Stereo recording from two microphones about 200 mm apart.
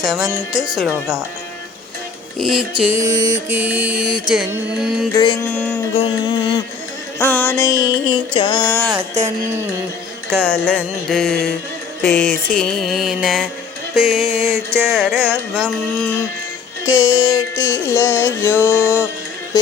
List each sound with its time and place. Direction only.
0.0 s music: centre (ahead or behind)
2.4 s music: 5° right (ahead or behind)
3.0 s music: 15° right (ahead or behind)
5.1 s mantra: 25° left (ahead or behind)
5.5 s music: 10° left (ahead or behind)
5.9 s mantra: 25° left (ahead or behind)
7.2 s music: 10° left (ahead or behind)
9.2 s music: 35° right (ahead or behind)
10.3 s music: 5° left (ahead or behind)
16.0 s music: 15° left (ahead or behind)